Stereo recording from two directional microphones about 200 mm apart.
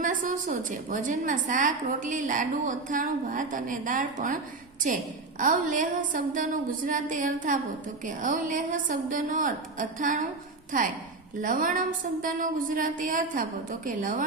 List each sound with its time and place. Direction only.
0.0 s a woman's voice: 40° right (ahead or behind)
5.4 s a woman's voice: 40° right (ahead or behind)